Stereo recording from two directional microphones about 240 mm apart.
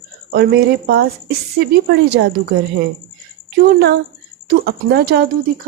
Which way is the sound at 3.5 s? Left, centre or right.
Right.